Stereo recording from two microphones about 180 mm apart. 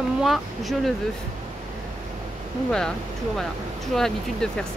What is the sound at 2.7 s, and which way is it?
Speech, 5° left (ahead or behind).